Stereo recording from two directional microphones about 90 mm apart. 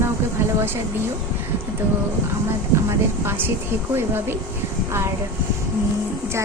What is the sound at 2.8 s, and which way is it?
Speech, 25° right (ahead or behind).